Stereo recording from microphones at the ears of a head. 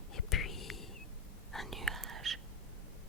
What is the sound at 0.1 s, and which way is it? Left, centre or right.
Whispering, left.